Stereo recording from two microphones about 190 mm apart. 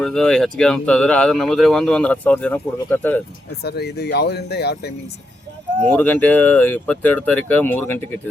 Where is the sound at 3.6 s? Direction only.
60° left (ahead or behind).